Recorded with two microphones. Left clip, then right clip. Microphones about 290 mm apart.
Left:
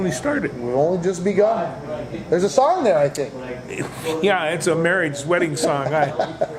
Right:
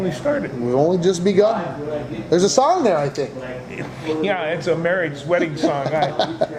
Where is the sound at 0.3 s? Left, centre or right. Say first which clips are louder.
Right 2 dB; left.